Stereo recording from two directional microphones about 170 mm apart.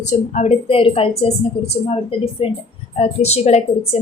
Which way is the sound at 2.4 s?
30° left (ahead or behind).